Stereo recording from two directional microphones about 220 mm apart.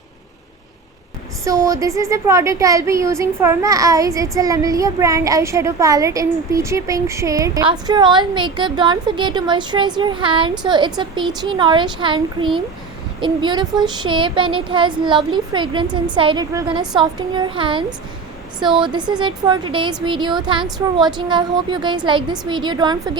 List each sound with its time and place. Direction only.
1.5 s speech: 15° right (ahead or behind)